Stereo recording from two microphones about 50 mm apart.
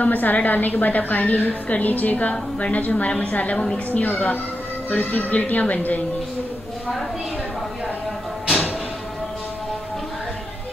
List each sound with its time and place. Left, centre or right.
0.0 s a woman's voice: left